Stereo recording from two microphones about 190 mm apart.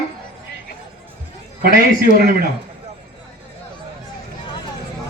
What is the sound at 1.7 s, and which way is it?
Speech, 50° right (ahead or behind).